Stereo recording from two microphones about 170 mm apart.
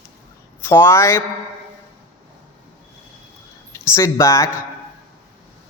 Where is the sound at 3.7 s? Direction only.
15° left (ahead or behind).